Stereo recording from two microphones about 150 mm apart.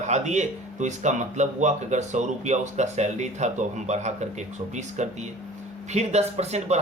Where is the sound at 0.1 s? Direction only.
50° right (ahead or behind).